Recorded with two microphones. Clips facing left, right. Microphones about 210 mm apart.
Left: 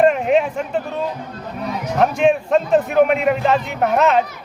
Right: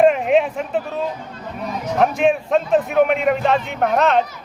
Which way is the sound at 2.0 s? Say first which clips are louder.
Left 1 dB; centre (ahead or behind).